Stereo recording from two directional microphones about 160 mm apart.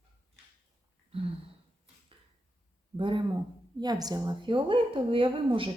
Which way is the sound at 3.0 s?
30° right (ahead or behind).